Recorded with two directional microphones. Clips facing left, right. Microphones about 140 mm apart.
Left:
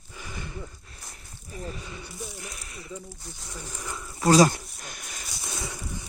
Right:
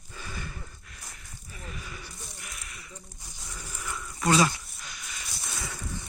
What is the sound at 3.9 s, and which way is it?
Speech, 25° left (ahead or behind).